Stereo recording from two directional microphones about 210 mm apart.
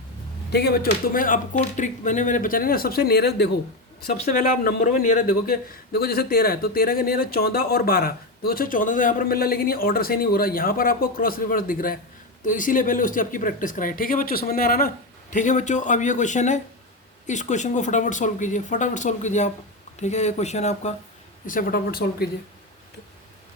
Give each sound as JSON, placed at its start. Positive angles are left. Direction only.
{"t": 0.5, "sound": "a man's voice", "side_deg": 50}